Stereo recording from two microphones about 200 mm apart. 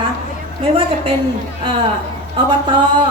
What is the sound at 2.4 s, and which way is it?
Speech, 25° right (ahead or behind).